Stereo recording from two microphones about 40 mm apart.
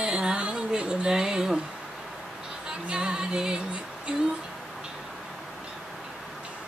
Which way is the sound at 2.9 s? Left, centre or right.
Right.